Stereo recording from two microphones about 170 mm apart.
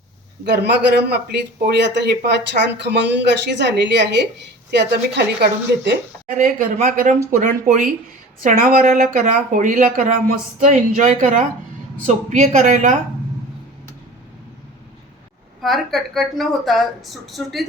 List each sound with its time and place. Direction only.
0.4 s speech: 75° right (ahead or behind)
6.3 s speech: 50° right (ahead or behind)
15.6 s a woman's voice: centre (ahead or behind)